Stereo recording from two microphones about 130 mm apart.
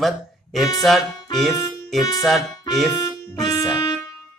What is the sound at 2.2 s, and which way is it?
Speech, centre (ahead or behind).